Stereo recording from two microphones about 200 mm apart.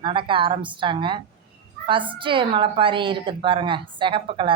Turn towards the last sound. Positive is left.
turn(degrees=-25)  # may be behind; listen again after turning